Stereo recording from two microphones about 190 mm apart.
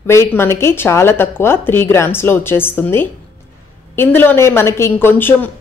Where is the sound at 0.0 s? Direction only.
15° left (ahead or behind).